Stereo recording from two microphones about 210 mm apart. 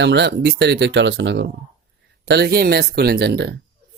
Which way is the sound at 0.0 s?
55° right (ahead or behind).